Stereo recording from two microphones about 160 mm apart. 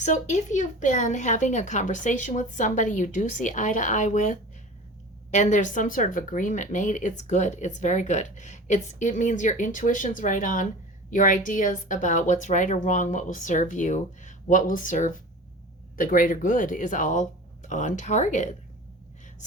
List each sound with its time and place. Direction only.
0.0 s speech: 50° left (ahead or behind)